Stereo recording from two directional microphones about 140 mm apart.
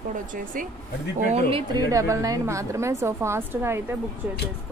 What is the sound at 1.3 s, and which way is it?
Speech, 45° right (ahead or behind).